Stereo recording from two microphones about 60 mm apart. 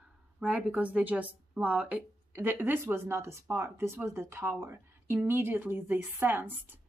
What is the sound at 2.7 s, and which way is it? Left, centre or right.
A woman's voice, right.